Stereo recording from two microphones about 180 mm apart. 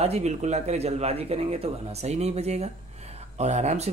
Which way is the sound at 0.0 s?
35° right (ahead or behind).